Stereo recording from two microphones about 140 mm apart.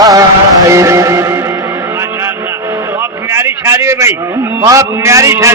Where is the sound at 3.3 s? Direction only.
20° right (ahead or behind).